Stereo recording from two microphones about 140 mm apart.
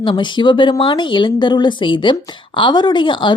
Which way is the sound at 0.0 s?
35° left (ahead or behind).